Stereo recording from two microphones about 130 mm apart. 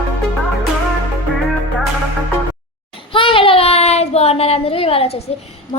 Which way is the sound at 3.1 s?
45° left (ahead or behind).